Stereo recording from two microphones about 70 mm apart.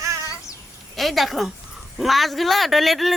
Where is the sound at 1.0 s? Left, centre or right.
Centre.